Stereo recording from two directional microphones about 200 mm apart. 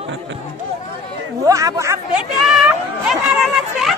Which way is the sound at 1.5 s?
15° right (ahead or behind).